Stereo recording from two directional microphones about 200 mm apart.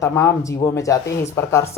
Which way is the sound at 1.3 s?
15° left (ahead or behind).